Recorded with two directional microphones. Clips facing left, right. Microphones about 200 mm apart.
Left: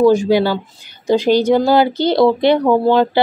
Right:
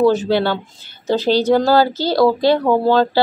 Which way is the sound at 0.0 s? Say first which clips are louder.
Left 3 dB; 10° left (ahead or behind).